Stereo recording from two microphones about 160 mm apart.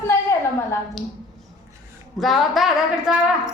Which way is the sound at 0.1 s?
15° left (ahead or behind).